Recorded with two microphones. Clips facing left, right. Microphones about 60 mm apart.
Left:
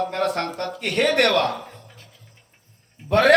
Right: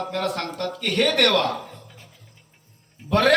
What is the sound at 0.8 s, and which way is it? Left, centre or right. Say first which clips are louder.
Speech: left 1 dB; centre.